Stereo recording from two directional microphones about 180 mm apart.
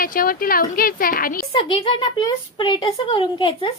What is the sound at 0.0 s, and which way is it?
A woman's voice, 50° left (ahead or behind).